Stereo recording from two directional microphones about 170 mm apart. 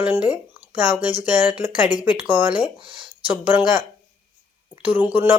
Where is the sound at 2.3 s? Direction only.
10° right (ahead or behind).